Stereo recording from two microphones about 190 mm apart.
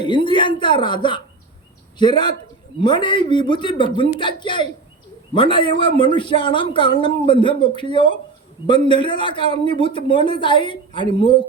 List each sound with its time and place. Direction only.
0.0 s speech: 25° left (ahead or behind)